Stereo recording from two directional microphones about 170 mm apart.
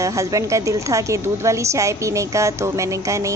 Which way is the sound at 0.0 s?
20° right (ahead or behind).